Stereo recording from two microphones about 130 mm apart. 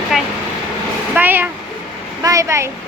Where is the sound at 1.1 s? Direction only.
15° right (ahead or behind).